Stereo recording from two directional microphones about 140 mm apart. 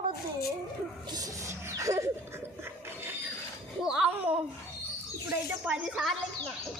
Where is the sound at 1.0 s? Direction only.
25° right (ahead or behind).